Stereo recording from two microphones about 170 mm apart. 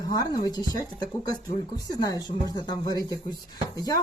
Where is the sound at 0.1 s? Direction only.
25° left (ahead or behind).